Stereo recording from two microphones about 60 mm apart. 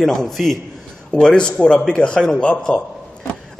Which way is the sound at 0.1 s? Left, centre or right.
Centre.